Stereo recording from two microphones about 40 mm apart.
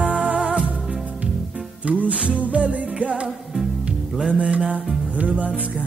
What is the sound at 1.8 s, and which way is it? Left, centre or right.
Music, right.